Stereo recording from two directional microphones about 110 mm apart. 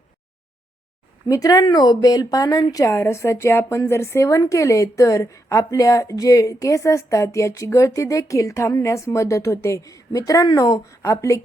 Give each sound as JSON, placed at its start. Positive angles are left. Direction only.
{"t": 1.3, "sound": "a woman's voice", "side_deg": 35}